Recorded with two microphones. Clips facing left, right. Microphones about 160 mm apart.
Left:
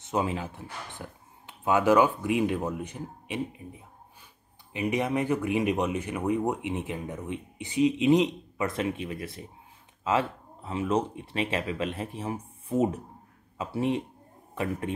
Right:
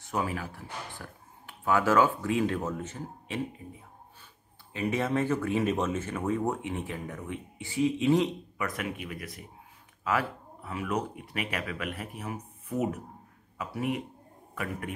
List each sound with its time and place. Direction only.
0.0 s speech: 20° left (ahead or behind)
4.7 s a man's voice: 15° left (ahead or behind)